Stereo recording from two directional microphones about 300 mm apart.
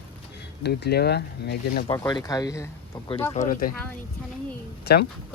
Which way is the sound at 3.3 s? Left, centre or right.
Left.